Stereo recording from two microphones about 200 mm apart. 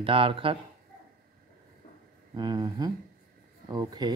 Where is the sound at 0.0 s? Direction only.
25° right (ahead or behind).